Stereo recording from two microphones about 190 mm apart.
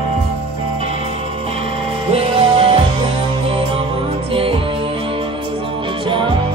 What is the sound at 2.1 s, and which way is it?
Music, 30° right (ahead or behind).